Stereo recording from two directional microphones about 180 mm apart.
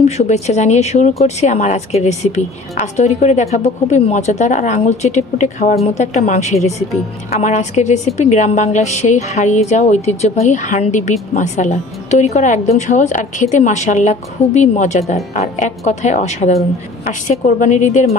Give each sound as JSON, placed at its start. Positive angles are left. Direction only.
{"t": 0.0, "sound": "a woman's voice", "side_deg": 40}